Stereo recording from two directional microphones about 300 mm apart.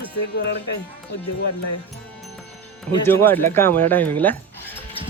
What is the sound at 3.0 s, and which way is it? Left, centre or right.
Speech, centre.